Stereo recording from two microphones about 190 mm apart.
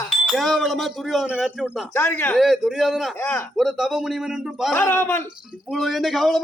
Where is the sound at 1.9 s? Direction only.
10° left (ahead or behind).